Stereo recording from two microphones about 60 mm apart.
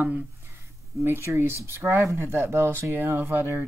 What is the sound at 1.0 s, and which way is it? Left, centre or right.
Speech, right.